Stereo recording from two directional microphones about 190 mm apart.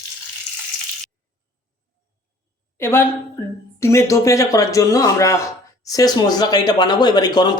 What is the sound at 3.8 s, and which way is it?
A man's voice, 15° left (ahead or behind).